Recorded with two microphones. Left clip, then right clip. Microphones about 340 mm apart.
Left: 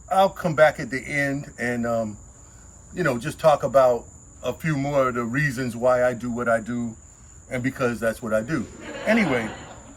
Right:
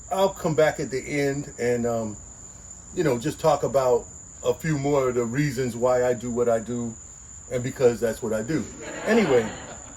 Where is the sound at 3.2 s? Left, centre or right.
Left.